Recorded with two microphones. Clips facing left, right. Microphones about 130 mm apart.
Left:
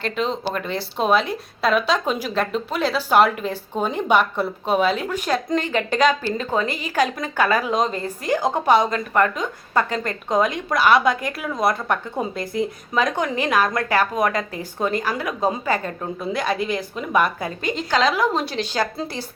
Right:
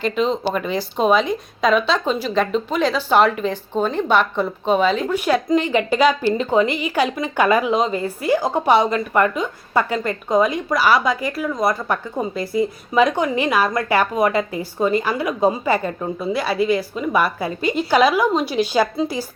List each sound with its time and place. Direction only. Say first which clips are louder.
0.0 s speech: right 4 dB; centre (ahead or behind)
5.1 s a woman's voice: right 4 dB; 10° right (ahead or behind)
18.6 s a woman's voice: right 8 dB; 10° right (ahead or behind)